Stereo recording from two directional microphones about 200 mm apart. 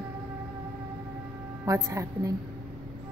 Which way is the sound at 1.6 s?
15° right (ahead or behind).